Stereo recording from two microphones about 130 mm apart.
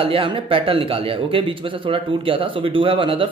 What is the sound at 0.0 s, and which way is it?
Speech, 45° right (ahead or behind).